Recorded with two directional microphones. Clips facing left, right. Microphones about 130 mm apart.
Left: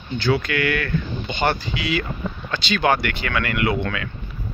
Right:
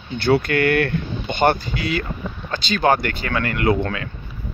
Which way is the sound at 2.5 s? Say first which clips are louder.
Right 2 dB; 40° right (ahead or behind).